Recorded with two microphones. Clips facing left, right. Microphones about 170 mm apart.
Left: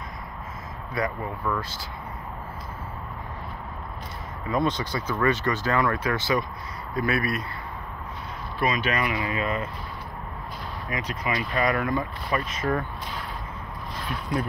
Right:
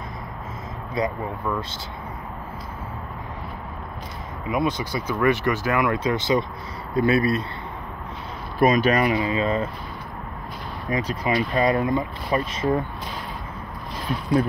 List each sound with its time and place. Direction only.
0.9 s speech: 15° right (ahead or behind)
4.5 s speech: 10° right (ahead or behind); by 7.4 s 25° right (ahead or behind)
8.5 s speech: 40° right (ahead or behind)
10.9 s speech: 30° right (ahead or behind)